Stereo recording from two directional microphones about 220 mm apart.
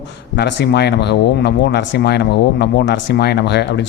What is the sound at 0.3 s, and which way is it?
Speech, 50° left (ahead or behind).